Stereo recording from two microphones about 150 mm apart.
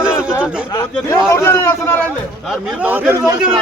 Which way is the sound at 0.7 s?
25° left (ahead or behind).